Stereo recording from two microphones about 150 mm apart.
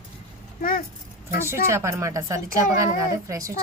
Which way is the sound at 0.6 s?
70° left (ahead or behind).